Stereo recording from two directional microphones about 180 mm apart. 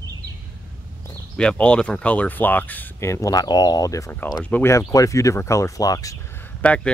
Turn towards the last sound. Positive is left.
turn(degrees=10)  # may be behind; listen again after turning